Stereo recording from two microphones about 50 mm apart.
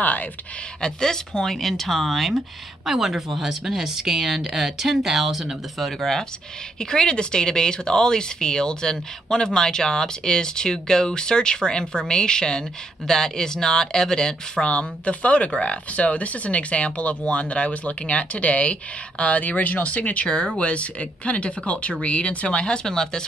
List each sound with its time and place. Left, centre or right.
0.0 s speech: left
0.7 s speech: centre
6.8 s speech: centre
22.8 s speech: centre